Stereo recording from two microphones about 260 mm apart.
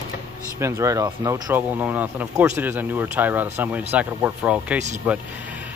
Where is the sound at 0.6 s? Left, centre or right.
Centre.